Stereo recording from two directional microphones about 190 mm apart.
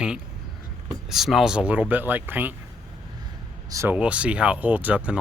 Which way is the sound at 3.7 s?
15° right (ahead or behind).